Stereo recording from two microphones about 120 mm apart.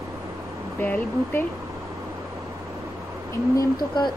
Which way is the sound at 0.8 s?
15° left (ahead or behind).